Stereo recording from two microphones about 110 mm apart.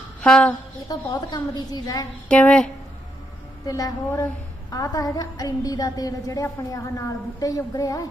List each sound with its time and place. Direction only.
0.2 s a sound: 10° left (ahead or behind)
0.9 s a woman's voice: 40° left (ahead or behind)
2.3 s speech: 10° left (ahead or behind)
3.7 s a woman's voice: 35° left (ahead or behind)